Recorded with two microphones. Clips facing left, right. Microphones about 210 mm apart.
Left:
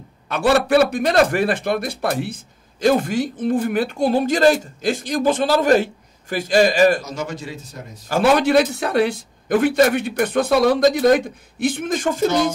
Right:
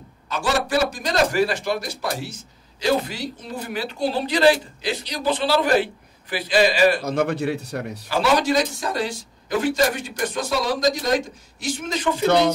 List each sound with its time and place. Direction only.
0.3 s a man's voice: 60° left (ahead or behind)
7.0 s speech: 60° right (ahead or behind)
8.1 s a man's voice: 55° left (ahead or behind)